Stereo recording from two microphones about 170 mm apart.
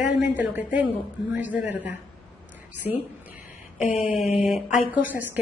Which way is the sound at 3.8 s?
45° left (ahead or behind).